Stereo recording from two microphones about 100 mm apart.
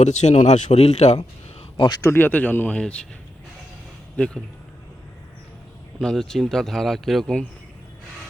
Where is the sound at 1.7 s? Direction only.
50° left (ahead or behind).